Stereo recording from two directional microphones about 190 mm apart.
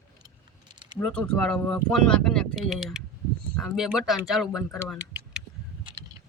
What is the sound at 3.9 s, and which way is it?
Speech, centre (ahead or behind).